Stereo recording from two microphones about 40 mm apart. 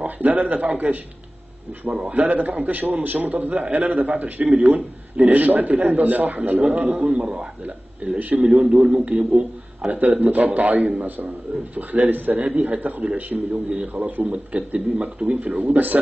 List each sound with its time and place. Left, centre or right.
0.0 s a man's voice: right
1.9 s a man's voice: right
2.1 s a man's voice: right
6.6 s a man's voice: right
9.8 s a man's voice: right
12.4 s a man's voice: right
15.5 s a man's voice: right